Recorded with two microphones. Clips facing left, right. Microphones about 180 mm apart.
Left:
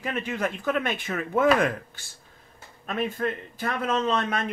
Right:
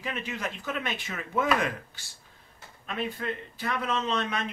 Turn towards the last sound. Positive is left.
turn(degrees=50)  # may be behind; listen again after turning